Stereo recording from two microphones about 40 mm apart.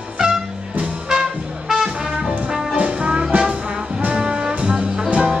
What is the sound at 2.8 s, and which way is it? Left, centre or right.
Music, right.